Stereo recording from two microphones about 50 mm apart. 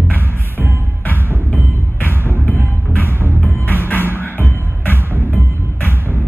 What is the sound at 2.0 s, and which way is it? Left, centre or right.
Music, left.